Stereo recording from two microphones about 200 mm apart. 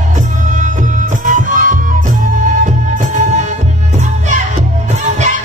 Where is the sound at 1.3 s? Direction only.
40° right (ahead or behind).